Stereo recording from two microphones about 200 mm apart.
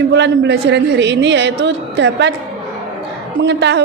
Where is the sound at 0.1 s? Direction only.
60° right (ahead or behind).